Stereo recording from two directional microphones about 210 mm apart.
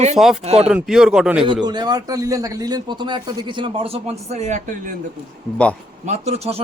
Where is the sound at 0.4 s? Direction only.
30° right (ahead or behind).